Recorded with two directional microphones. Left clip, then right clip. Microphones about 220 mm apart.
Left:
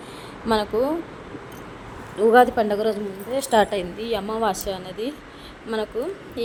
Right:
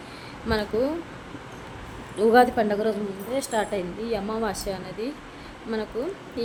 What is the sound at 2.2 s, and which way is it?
A woman's voice, 5° left (ahead or behind).